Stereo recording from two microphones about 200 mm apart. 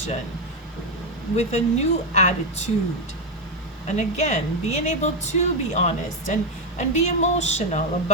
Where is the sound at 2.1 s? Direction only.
35° left (ahead or behind).